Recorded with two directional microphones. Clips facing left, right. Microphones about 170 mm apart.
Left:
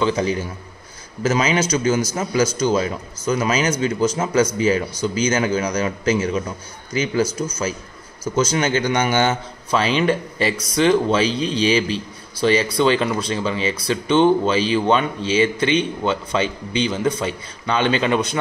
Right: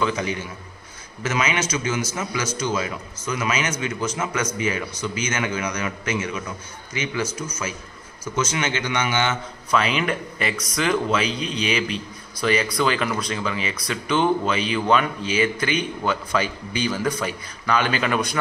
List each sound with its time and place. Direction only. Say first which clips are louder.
0.0 s a man's voice: left 5 dB; 35° left (ahead or behind)